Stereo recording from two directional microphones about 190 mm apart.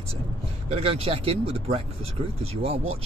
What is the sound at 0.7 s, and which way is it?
Speech, 35° right (ahead or behind).